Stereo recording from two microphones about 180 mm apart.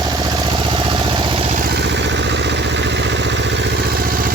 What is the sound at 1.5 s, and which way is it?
Vehicle, 60° right (ahead or behind).